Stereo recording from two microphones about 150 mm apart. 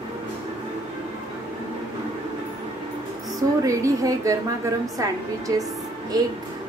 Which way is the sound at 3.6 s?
20° right (ahead or behind).